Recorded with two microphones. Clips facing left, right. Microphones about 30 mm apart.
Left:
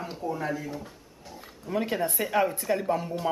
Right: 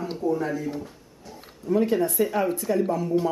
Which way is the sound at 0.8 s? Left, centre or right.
Centre.